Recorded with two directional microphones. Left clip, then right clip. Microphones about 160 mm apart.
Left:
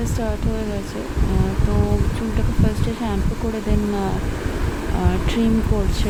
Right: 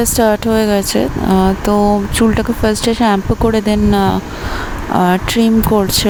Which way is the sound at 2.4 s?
60° right (ahead or behind).